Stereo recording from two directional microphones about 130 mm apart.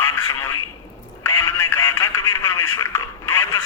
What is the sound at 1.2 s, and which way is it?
Radio, 25° left (ahead or behind).